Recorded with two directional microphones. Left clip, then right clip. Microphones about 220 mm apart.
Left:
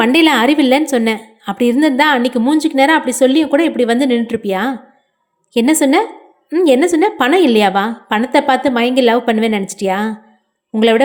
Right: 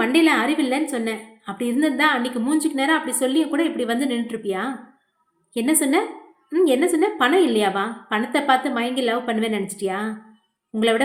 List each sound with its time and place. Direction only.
0.0 s a woman's voice: 35° left (ahead or behind)